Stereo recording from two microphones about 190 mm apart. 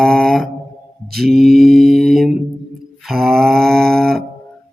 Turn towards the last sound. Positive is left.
turn(degrees=5)  # may be behind; listen again after turning